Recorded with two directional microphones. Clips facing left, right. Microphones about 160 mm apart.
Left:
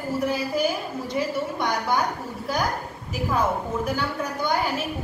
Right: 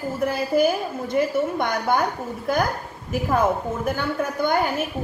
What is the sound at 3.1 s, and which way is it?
A woman's voice, 50° right (ahead or behind).